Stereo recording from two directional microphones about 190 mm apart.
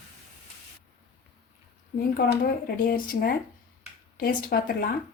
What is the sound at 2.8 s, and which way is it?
Speech, 50° left (ahead or behind).